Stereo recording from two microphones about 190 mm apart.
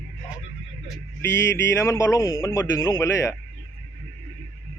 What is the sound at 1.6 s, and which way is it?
A man's voice, 15° left (ahead or behind).